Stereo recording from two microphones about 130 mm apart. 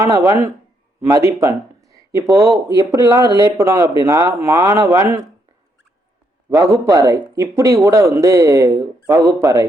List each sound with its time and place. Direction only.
0.3 s speech: 20° right (ahead or behind)
6.5 s speech: 25° right (ahead or behind)